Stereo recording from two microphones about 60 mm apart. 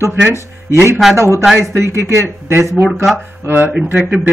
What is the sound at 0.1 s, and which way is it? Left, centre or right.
Speech, right.